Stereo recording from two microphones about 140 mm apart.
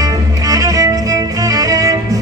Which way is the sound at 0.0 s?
25° right (ahead or behind).